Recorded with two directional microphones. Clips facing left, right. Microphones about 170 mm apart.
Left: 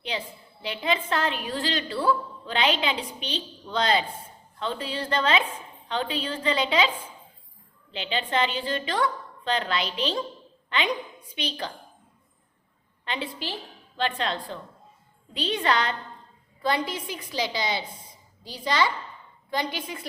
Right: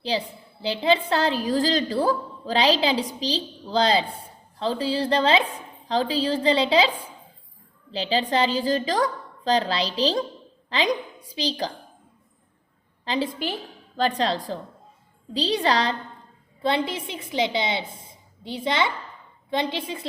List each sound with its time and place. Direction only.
0.1 s a woman's voice: 35° right (ahead or behind)
13.1 s a woman's voice: 40° right (ahead or behind)